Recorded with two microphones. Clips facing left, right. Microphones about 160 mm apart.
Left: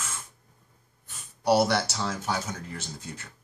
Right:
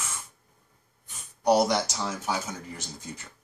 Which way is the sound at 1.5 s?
15° right (ahead or behind).